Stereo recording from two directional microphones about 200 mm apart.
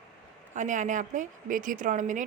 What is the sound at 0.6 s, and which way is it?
A woman's voice, 40° right (ahead or behind).